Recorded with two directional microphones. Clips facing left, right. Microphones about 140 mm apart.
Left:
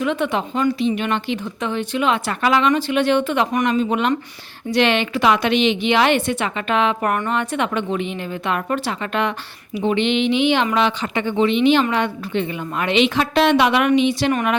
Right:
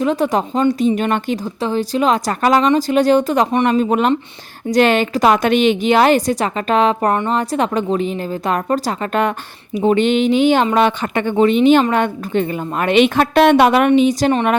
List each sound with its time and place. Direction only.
0.0 s a woman's voice: 35° right (ahead or behind)